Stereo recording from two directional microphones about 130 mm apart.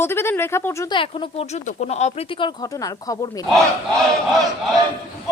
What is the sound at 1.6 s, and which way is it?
Speech, 65° left (ahead or behind).